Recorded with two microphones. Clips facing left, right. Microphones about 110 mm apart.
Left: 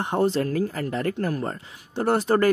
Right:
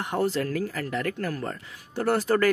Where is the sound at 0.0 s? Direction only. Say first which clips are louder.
Left 4 dB; 25° left (ahead or behind).